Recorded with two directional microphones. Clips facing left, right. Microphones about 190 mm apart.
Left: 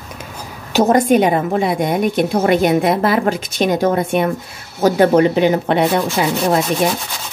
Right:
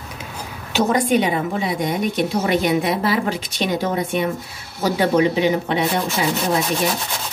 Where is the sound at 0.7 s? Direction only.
45° left (ahead or behind).